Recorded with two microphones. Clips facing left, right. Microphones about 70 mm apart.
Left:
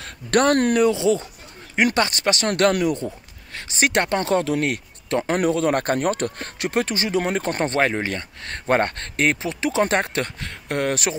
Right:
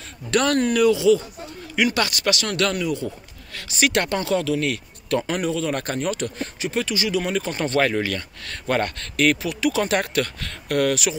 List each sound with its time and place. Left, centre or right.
0.0 s speech: left
0.7 s speech: left
2.7 s speech: left
3.5 s speech: left
5.4 s speech: left
7.8 s speech: left